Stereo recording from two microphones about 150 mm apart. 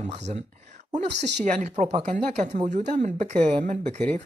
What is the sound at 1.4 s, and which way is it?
Speech, 50° right (ahead or behind).